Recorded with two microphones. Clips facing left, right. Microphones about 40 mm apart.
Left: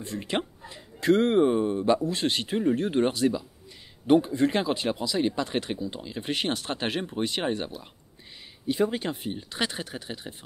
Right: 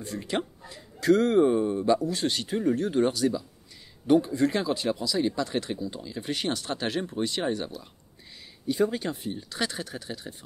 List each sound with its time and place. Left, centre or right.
0.0 s speech: left